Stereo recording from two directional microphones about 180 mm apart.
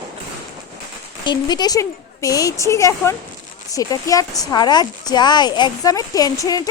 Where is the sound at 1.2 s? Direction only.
25° left (ahead or behind).